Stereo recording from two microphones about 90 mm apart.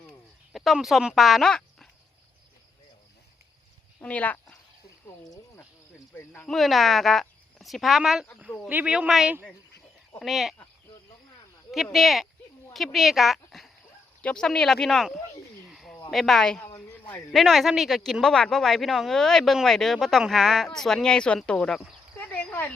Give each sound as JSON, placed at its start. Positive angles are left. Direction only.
{"t": 0.5, "sound": "speech", "side_deg": 0}
{"t": 4.0, "sound": "speech", "side_deg": 15}
{"t": 6.5, "sound": "speech", "side_deg": 0}
{"t": 8.7, "sound": "speech", "side_deg": -15}
{"t": 11.7, "sound": "speech", "side_deg": 0}
{"t": 14.2, "sound": "speech", "side_deg": 10}
{"t": 15.7, "sound": "a sound", "side_deg": 0}
{"t": 16.0, "sound": "speech", "side_deg": 0}
{"t": 16.9, "sound": "a sound", "side_deg": 20}
{"t": 17.3, "sound": "speech", "side_deg": 0}
{"t": 22.2, "sound": "a sound", "side_deg": 20}